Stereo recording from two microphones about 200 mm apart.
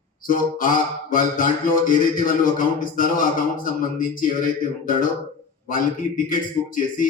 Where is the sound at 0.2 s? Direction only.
45° left (ahead or behind).